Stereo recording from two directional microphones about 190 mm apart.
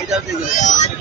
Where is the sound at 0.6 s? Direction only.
40° left (ahead or behind).